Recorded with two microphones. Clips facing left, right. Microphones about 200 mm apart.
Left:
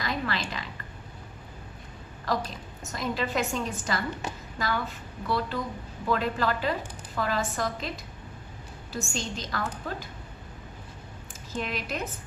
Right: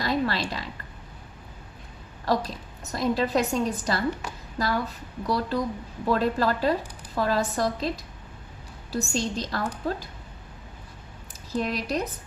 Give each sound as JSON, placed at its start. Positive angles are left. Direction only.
{"t": 0.0, "sound": "a sound", "side_deg": -35}
{"t": 2.2, "sound": "a woman's voice", "side_deg": -35}
{"t": 11.5, "sound": "a woman's voice", "side_deg": -35}